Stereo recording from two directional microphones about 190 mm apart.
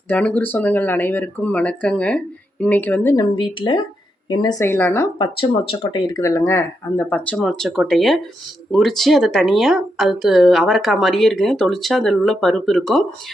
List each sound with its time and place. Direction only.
0.1 s speech: 5° left (ahead or behind)
3.3 s speech: 25° left (ahead or behind)
5.1 s speech: 25° left (ahead or behind); by 13.1 s centre (ahead or behind)